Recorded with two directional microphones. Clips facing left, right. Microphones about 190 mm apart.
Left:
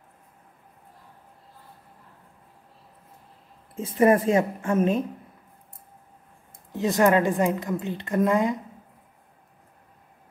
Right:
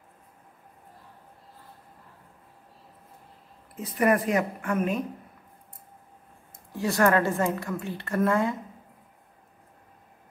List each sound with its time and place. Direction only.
3.7 s a woman's voice: 25° left (ahead or behind)
6.7 s a woman's voice: 20° left (ahead or behind)